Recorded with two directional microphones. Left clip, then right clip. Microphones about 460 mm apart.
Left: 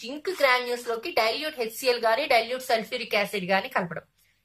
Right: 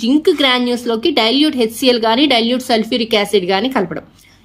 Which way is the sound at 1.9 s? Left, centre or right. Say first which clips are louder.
Right 6 dB; centre.